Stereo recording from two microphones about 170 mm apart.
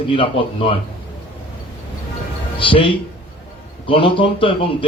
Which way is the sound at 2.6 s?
30° left (ahead or behind).